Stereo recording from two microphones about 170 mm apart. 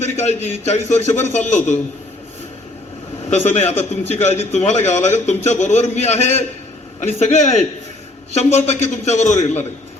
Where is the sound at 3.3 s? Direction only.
40° left (ahead or behind).